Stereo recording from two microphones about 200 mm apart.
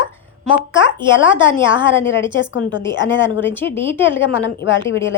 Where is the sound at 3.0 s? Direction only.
65° left (ahead or behind).